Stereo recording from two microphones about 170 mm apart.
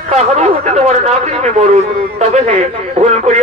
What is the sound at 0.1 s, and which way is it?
A man's voice, 40° right (ahead or behind).